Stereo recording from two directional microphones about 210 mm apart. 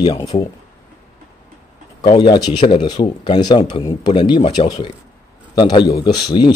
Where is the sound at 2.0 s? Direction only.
20° left (ahead or behind).